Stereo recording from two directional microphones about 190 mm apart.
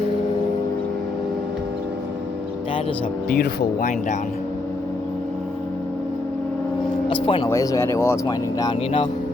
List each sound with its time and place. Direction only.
3.2 s speech: 55° left (ahead or behind)
7.1 s speech: 25° left (ahead or behind)